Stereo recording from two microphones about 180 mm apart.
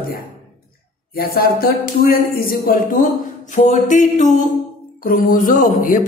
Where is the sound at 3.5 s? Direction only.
45° left (ahead or behind).